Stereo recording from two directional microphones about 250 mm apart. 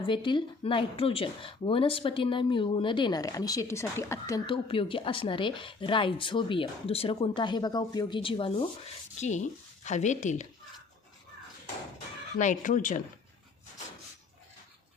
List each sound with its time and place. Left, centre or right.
0.0 s speech: centre
12.4 s speech: left